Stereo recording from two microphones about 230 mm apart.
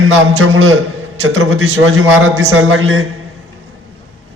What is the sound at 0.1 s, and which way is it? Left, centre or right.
A man's voice, right.